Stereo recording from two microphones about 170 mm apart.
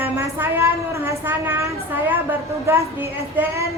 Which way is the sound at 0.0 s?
10° right (ahead or behind).